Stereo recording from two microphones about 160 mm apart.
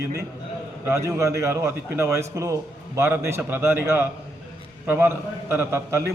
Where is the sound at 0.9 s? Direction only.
20° right (ahead or behind).